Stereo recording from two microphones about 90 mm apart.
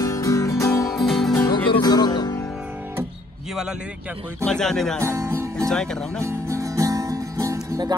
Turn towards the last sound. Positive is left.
turn(degrees=-35)  # may be behind; listen again after turning